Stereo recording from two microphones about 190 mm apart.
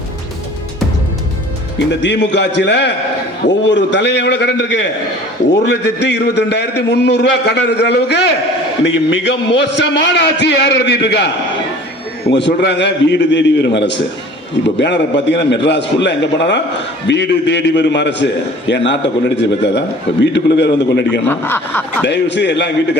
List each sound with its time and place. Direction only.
1.9 s a man's voice: 65° left (ahead or behind)
8.8 s a man's voice: 75° left (ahead or behind)
12.3 s a man's voice: 65° left (ahead or behind)
21.2 s speech: 10° left (ahead or behind)
22.0 s a man's voice: 65° left (ahead or behind)